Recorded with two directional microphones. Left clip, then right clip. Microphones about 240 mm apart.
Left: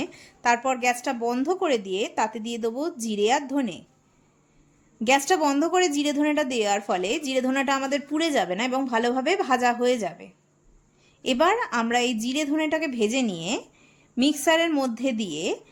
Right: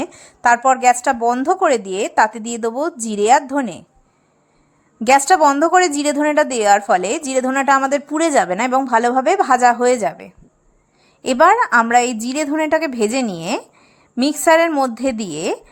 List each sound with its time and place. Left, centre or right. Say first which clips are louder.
0.0 s a sound: right 9 dB; centre
1.0 s a woman's voice: right 10 dB; centre
5.3 s a woman's voice: right 10 dB; centre